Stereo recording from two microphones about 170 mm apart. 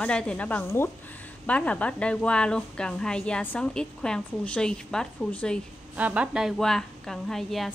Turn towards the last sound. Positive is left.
turn(degrees=0)  # may be behind; listen again after turning